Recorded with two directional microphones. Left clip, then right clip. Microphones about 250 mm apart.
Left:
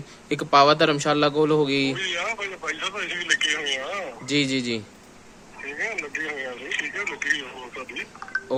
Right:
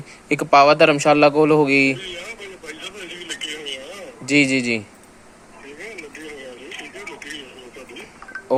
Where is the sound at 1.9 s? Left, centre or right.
Left.